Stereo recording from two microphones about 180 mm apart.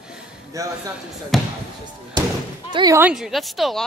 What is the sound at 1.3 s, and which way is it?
Speech, centre (ahead or behind).